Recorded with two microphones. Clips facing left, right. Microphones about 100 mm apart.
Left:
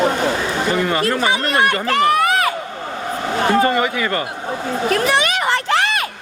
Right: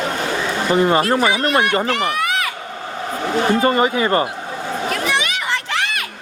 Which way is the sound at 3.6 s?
30° right (ahead or behind).